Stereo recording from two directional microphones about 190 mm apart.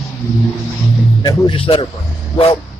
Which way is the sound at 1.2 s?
25° left (ahead or behind).